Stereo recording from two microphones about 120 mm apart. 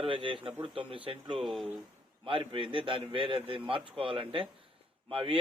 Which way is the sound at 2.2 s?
45° right (ahead or behind).